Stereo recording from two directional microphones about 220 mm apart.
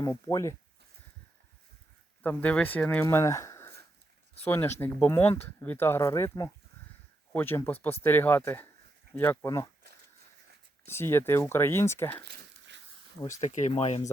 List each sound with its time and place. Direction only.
0.0 s speech: 15° left (ahead or behind)
2.2 s speech: 5° left (ahead or behind)
10.8 s speech: 10° left (ahead or behind)
12.2 s a sound: 50° right (ahead or behind)
13.4 s speech: 35° left (ahead or behind)